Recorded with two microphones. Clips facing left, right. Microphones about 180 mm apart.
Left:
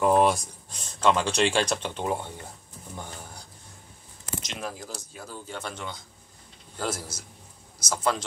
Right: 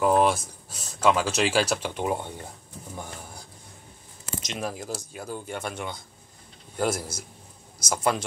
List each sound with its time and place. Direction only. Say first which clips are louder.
0.0 s speech: even; centre (ahead or behind)
4.4 s speech: right 6 dB; 20° right (ahead or behind)